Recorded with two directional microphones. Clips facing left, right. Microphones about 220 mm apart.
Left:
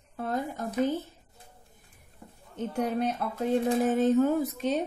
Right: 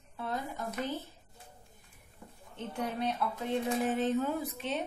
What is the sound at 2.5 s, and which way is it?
Speech, 45° left (ahead or behind).